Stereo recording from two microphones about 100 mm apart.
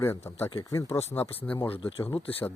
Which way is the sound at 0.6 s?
35° left (ahead or behind).